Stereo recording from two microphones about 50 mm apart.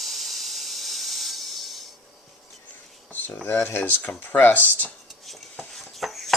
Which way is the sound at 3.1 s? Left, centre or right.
Left.